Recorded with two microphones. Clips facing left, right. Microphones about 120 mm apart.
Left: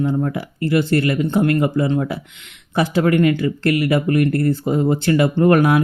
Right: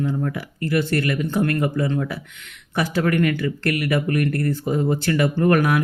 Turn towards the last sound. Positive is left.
turn(degrees=25)  # may be behind; listen again after turning